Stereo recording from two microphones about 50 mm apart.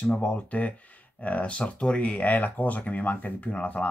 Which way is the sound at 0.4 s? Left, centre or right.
Left.